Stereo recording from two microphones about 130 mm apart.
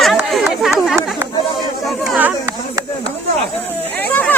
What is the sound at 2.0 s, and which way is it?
Chatter, 10° right (ahead or behind).